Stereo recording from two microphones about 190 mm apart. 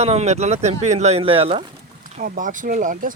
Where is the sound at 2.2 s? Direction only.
45° right (ahead or behind).